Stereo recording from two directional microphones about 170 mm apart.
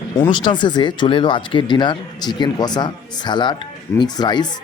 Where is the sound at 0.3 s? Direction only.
25° left (ahead or behind).